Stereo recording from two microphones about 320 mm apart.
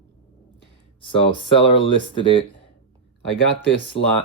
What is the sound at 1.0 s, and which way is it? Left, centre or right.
Speech, centre.